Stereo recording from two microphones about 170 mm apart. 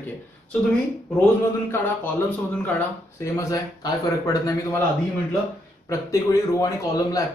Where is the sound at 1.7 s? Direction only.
10° left (ahead or behind).